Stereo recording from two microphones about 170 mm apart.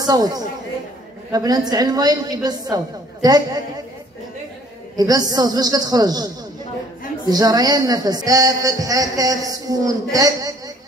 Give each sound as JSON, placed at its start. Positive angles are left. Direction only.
{"t": 0.0, "sound": "a man's voice", "side_deg": -20}
{"t": 4.9, "sound": "a woman's voice", "side_deg": -20}